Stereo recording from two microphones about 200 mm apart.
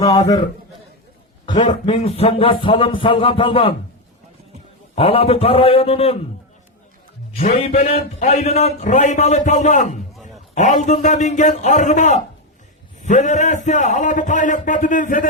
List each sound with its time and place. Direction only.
0.1 s music: 20° left (ahead or behind)
1.5 s music: 35° left (ahead or behind)
4.9 s music: 30° left (ahead or behind)
7.3 s a man's voice: 30° left (ahead or behind)